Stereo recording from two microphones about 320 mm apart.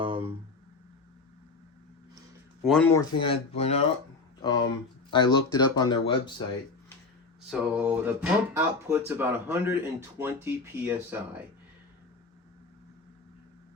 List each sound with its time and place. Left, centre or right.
0.0 s a sound: centre
2.6 s speech: centre
7.5 s speech: centre